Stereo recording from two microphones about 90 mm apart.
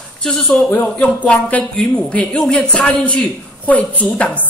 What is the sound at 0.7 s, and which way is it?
A woman's voice, 20° left (ahead or behind).